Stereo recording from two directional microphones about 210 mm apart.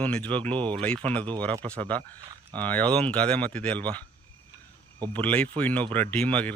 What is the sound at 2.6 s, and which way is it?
Speech, 5° left (ahead or behind).